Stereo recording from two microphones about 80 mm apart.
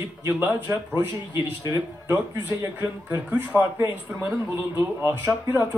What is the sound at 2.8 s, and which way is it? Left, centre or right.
Speech, right.